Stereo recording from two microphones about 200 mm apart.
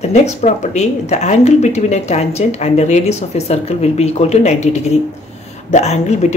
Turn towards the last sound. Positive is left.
turn(degrees=35)  # may be behind; listen again after turning